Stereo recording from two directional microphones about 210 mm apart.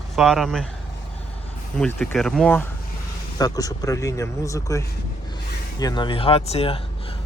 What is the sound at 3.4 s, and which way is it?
Speech, 15° left (ahead or behind).